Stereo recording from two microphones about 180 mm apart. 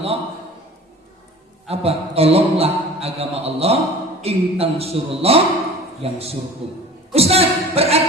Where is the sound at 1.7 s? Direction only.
35° right (ahead or behind).